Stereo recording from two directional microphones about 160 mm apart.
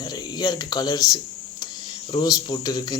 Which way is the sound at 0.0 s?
25° left (ahead or behind).